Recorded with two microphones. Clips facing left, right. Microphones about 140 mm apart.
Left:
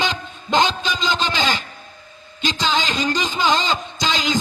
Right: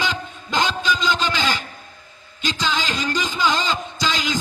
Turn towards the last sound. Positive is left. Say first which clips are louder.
# left 2 dB
turn(degrees=20)  # may be behind; listen again after turning